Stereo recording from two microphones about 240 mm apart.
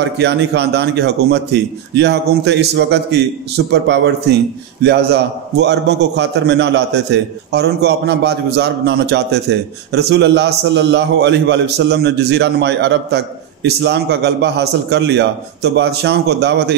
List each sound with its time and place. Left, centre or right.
0.0 s a man's voice: right